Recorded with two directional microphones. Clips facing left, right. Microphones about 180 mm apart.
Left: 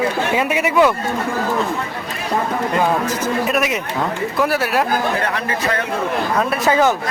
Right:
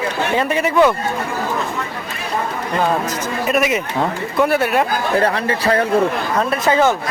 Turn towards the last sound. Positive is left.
turn(degrees=-35)  # may be behind; listen again after turning